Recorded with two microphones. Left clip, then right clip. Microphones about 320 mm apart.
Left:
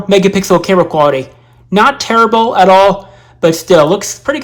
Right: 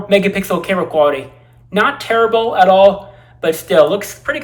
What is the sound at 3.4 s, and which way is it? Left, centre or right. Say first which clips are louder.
Speech: left 4 dB; centre.